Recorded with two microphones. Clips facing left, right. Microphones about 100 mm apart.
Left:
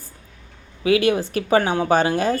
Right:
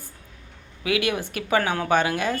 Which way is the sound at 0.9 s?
30° left (ahead or behind).